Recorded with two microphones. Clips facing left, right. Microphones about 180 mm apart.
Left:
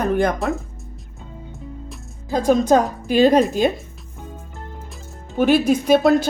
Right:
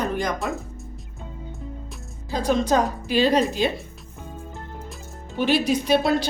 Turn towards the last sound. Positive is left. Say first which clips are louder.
# left 6 dB
turn(degrees=50)  # may be behind; listen again after turning